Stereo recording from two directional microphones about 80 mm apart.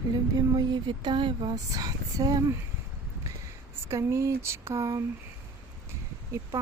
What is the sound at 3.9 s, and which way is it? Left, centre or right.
Speech, right.